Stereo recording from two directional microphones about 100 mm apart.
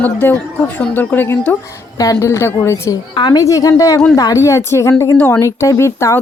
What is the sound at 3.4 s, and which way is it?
Speech, 35° left (ahead or behind).